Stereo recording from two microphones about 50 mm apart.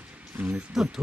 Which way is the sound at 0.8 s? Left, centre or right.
Centre.